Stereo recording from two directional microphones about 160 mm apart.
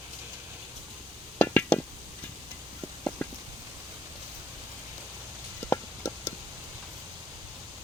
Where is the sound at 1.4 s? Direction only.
10° left (ahead or behind).